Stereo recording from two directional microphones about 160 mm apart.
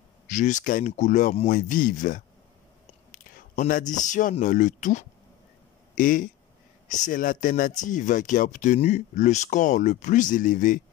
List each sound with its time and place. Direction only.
0.3 s speech: 50° left (ahead or behind)
1.5 s speech: 55° left (ahead or behind)